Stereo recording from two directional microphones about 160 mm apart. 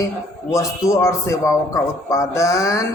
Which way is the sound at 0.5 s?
20° left (ahead or behind).